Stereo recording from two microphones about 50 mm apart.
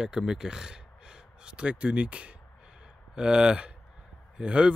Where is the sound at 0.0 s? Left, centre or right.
Centre.